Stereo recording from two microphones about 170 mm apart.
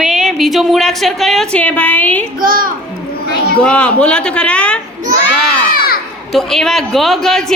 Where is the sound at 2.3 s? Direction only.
55° right (ahead or behind).